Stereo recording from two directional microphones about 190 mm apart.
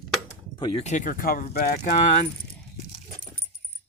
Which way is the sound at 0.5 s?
30° left (ahead or behind).